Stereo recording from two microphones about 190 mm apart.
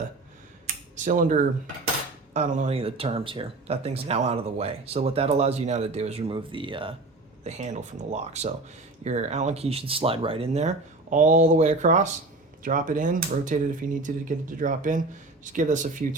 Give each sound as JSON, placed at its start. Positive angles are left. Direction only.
{"t": 0.9, "sound": "speech", "side_deg": -40}
{"t": 7.4, "sound": "speech", "side_deg": -35}